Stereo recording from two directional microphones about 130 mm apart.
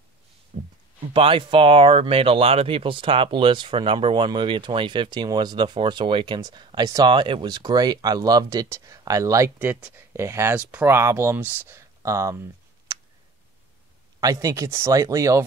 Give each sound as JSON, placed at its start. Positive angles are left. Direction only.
{"t": 0.5, "sound": "heart sounds", "side_deg": -65}
{"t": 1.1, "sound": "speech", "side_deg": -40}
{"t": 9.6, "sound": "speech", "side_deg": -10}
{"t": 12.0, "sound": "a sound", "side_deg": -25}
{"t": 14.2, "sound": "speech", "side_deg": -25}